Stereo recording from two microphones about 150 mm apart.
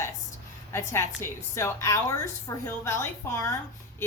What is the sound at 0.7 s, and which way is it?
A woman's voice, 20° left (ahead or behind).